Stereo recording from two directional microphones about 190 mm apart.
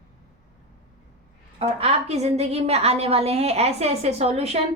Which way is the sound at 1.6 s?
30° right (ahead or behind).